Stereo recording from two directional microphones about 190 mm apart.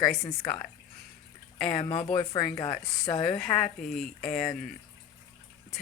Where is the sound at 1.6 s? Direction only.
25° left (ahead or behind).